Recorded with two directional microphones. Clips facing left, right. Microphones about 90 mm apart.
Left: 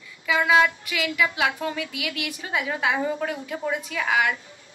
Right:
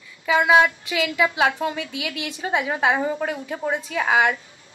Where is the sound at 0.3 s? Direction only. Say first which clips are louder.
Right 3 dB; 25° right (ahead or behind).